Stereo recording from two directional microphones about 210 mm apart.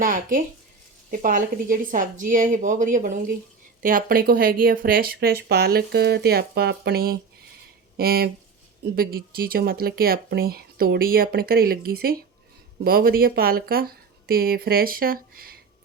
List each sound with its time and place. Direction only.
0.0 s a woman's voice: 40° right (ahead or behind)